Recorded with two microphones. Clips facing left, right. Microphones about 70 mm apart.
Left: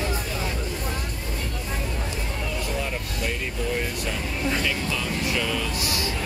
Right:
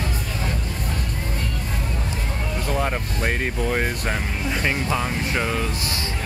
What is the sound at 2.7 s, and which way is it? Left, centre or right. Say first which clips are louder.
Speech: right 5 dB; right.